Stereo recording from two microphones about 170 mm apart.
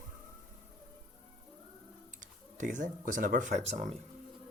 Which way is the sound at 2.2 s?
50° right (ahead or behind).